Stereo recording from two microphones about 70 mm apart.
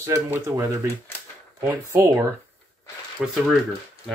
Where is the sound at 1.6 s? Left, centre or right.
Right.